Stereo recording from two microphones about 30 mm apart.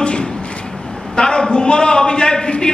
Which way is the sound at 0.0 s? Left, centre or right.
Left.